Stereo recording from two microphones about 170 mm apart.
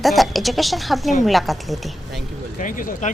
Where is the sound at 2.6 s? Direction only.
50° left (ahead or behind).